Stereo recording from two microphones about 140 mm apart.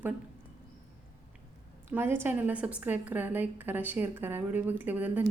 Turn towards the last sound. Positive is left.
turn(degrees=-15)  # may be behind; listen again after turning